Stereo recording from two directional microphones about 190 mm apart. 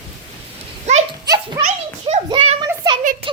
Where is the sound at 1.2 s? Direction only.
20° right (ahead or behind).